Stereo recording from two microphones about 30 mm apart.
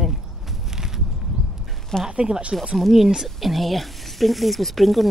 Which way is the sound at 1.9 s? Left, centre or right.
Centre.